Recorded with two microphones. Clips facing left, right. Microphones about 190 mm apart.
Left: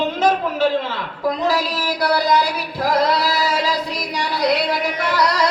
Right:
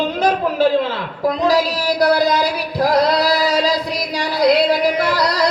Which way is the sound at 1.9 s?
40° right (ahead or behind).